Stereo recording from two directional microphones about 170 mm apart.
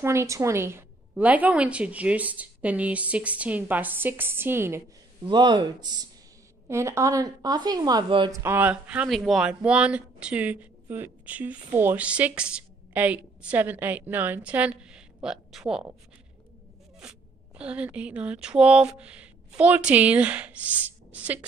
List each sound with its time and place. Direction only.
0.0 s speech: 15° right (ahead or behind)
5.2 s speech: 25° right (ahead or behind)
8.4 s speech: 10° right (ahead or behind)
17.0 s speech: 5° right (ahead or behind)